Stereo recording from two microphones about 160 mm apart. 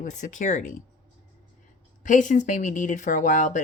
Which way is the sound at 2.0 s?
55° left (ahead or behind).